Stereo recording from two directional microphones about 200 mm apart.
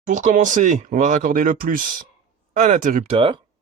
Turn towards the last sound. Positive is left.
turn(degrees=-25)  # may be behind; listen again after turning